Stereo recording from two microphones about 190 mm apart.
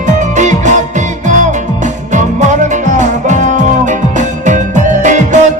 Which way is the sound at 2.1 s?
40° right (ahead or behind).